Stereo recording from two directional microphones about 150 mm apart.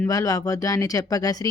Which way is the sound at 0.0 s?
20° left (ahead or behind).